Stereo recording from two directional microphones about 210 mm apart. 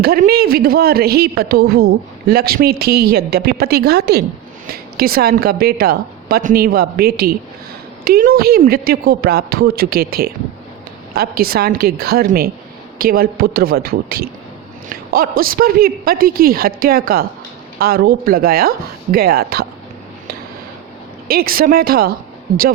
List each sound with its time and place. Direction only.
0.0 s speech: 45° right (ahead or behind)
21.2 s speech: 45° right (ahead or behind)